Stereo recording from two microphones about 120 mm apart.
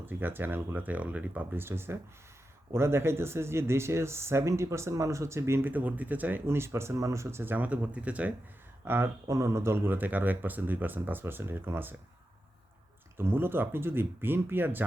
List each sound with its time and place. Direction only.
0.0 s speech: 15° right (ahead or behind)
13.1 s speech: 20° right (ahead or behind)